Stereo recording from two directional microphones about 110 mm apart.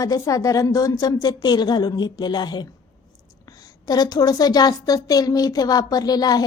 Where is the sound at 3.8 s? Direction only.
35° left (ahead or behind).